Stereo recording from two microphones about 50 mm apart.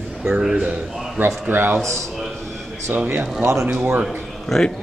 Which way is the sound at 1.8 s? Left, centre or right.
Right.